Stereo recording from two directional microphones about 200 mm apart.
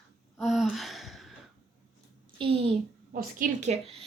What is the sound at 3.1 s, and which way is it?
Speech, 45° right (ahead or behind).